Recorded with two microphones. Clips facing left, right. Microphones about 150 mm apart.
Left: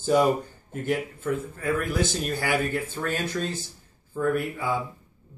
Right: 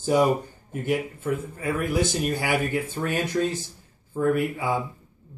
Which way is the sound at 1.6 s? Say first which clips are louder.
Right 1 dB; 15° right (ahead or behind).